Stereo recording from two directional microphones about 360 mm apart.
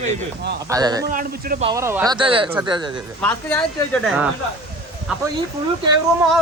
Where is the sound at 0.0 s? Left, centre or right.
Centre.